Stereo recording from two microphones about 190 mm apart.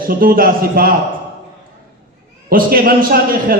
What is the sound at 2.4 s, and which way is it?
Speech, 50° right (ahead or behind).